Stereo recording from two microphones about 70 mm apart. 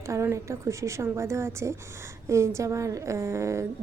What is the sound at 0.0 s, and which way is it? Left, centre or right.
A woman's voice, right.